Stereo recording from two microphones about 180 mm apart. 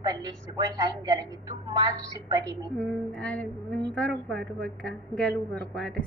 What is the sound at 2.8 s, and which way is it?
A woman's voice, 5° left (ahead or behind).